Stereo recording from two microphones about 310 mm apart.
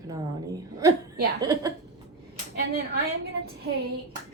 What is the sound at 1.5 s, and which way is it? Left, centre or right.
Speech, centre.